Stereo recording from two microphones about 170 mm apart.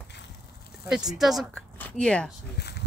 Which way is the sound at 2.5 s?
75° left (ahead or behind).